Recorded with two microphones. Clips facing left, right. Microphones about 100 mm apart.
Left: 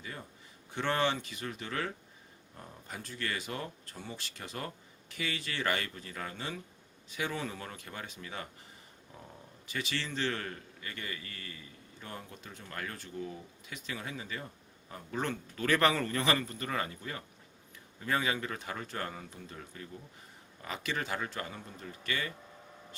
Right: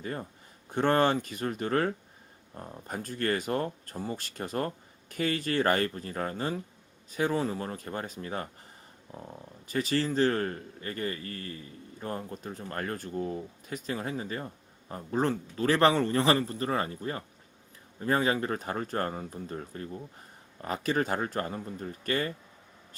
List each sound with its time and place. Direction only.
0.0 s a man's voice: 45° right (ahead or behind)